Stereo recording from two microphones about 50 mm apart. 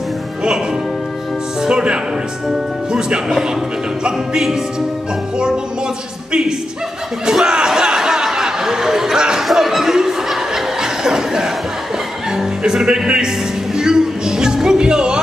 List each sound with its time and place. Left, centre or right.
1.6 s music: centre
7.2 s a sound: centre
9.5 s chuckle: centre
12.3 s speech: centre
13.7 s music: centre